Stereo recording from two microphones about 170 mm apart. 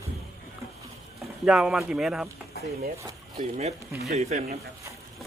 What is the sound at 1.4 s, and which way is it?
Speech, 5° right (ahead or behind).